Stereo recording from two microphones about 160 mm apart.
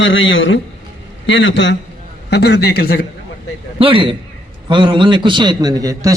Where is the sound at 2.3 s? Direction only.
90° left; by 3.0 s 75° left (ahead or behind).